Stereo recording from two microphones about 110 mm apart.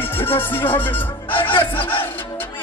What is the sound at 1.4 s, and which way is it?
Music, 50° left (ahead or behind).